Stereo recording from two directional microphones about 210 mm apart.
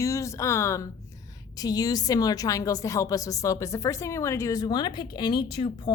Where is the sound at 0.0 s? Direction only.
15° left (ahead or behind).